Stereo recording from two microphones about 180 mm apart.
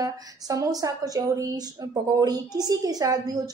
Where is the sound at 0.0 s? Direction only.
20° right (ahead or behind).